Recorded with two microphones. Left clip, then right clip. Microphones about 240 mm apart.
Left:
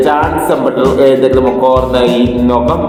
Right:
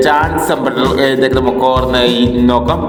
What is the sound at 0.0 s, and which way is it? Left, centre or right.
A man's voice, right.